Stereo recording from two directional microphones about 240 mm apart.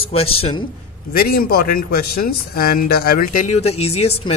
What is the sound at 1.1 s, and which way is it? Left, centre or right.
A man's voice, left.